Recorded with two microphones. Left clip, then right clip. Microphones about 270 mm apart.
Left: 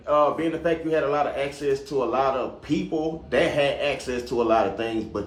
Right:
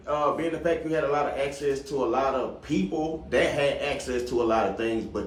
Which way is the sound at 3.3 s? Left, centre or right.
Left.